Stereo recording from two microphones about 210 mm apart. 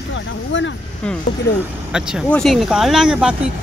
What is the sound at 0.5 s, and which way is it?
Speech, 60° left (ahead or behind).